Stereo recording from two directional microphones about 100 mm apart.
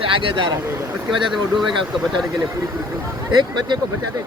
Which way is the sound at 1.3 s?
Centre (ahead or behind).